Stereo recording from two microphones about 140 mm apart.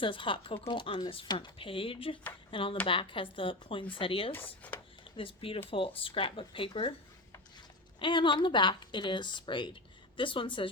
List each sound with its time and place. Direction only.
0.0 s speech: 40° left (ahead or behind)
4.4 s speech: 10° left (ahead or behind)
5.1 s speech: 40° left (ahead or behind)
7.9 s speech: 35° left (ahead or behind)